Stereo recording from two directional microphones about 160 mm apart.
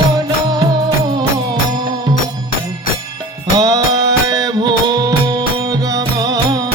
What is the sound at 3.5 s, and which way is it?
Music, 20° right (ahead or behind).